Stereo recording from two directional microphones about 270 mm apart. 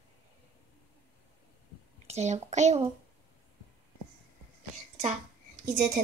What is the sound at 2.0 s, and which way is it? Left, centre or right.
Speech, right.